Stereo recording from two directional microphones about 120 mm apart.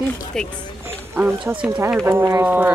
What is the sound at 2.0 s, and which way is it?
Speech, 20° right (ahead or behind).